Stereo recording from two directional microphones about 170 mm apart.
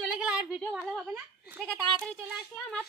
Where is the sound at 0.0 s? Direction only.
5° right (ahead or behind).